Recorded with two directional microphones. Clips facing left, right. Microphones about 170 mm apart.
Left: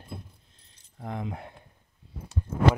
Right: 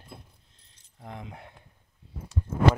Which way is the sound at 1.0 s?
60° left (ahead or behind).